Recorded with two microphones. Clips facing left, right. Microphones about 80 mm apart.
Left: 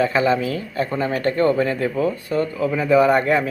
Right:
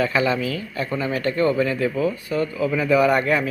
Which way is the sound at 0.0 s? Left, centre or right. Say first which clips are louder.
Left 3 dB; left.